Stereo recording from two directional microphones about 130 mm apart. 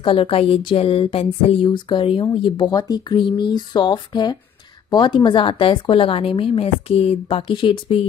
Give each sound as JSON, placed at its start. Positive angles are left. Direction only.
{"t": 0.0, "sound": "a woman's voice", "side_deg": 45}